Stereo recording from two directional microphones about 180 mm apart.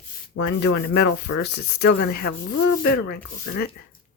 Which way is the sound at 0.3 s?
80° left.